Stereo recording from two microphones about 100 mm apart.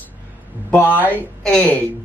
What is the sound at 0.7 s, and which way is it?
Speech, 20° left (ahead or behind).